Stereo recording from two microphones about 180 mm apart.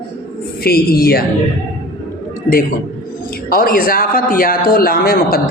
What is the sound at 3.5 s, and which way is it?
A man's voice, 50° left (ahead or behind).